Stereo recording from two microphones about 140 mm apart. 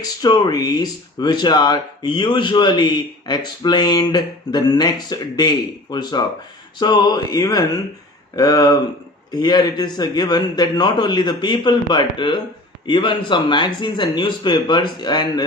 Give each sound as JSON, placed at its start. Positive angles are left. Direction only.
{"t": 0.0, "sound": "speech", "side_deg": 30}
{"t": 6.7, "sound": "a sound", "side_deg": 30}
{"t": 9.3, "sound": "speech", "side_deg": 30}